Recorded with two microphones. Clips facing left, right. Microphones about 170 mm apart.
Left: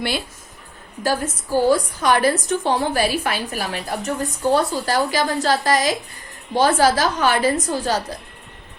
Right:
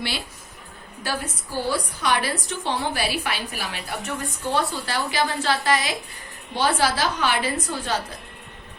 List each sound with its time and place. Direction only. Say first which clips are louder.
1.0 s a woman's voice: left 7 dB; 45° left (ahead or behind)